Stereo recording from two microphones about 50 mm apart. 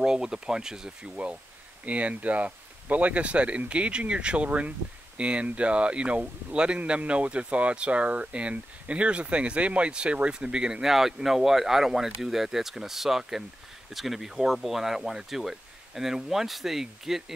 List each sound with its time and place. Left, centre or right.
0.0 s speech: centre
1.9 s speech: right; by 17.2 s centre